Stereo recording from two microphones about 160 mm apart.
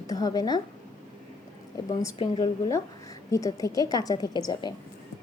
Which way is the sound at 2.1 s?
35° left (ahead or behind).